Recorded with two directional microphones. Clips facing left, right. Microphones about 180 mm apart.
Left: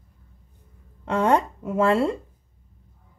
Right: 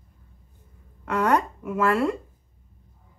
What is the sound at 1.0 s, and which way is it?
A woman's voice, 25° left (ahead or behind).